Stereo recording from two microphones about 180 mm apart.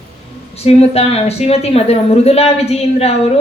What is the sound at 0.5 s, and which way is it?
Speech, 35° left (ahead or behind).